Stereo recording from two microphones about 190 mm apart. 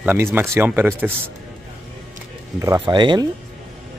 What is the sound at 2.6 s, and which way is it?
Speech, 20° right (ahead or behind).